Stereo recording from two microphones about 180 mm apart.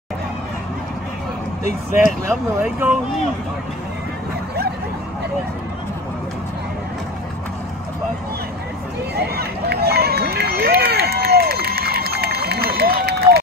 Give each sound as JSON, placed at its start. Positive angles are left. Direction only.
{"t": 2.2, "sound": "speech", "side_deg": -10}
{"t": 9.1, "sound": "run", "side_deg": -60}